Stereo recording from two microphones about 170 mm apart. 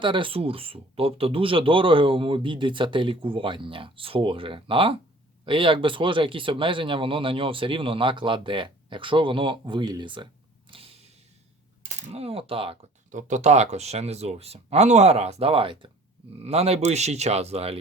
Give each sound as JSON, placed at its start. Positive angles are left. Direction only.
{"t": 0.0, "sound": "speech", "side_deg": -30}
{"t": 10.7, "sound": "creak", "side_deg": -35}
{"t": 12.0, "sound": "speech", "side_deg": -35}
{"t": 13.1, "sound": "speech", "side_deg": -45}